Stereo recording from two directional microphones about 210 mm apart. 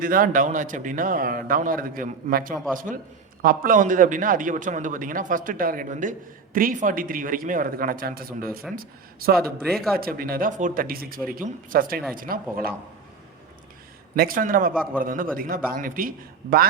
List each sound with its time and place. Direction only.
0.0 s a man's voice: 40° right (ahead or behind)
9.6 s speech: centre (ahead or behind)
10.0 s speech: 45° right (ahead or behind)
14.2 s a man's voice: 40° right (ahead or behind)